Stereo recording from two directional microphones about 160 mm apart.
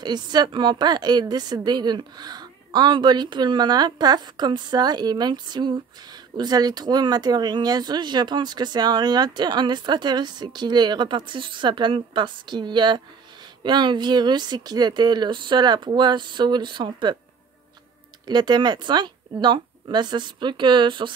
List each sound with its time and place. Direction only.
0.0 s speech: 25° right (ahead or behind)
18.2 s speech: 25° right (ahead or behind)